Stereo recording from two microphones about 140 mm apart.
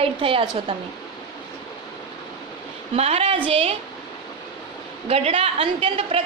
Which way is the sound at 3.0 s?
45° right (ahead or behind).